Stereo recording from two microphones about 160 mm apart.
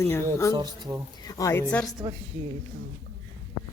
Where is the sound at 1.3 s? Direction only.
20° left (ahead or behind).